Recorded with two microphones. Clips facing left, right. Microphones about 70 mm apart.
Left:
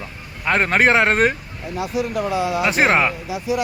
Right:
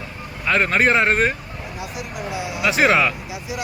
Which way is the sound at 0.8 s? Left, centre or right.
Left.